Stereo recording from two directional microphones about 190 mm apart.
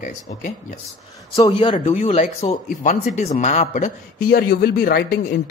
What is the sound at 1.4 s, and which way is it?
A man's voice, 30° left (ahead or behind).